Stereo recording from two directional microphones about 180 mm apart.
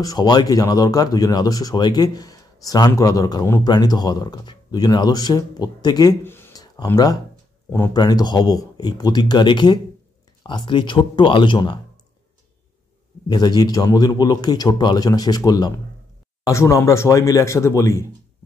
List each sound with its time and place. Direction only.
0.0 s speech: 20° left (ahead or behind)
13.3 s speech: 25° left (ahead or behind)